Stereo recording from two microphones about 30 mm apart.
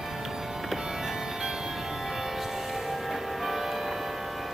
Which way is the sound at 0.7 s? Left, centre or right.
Centre.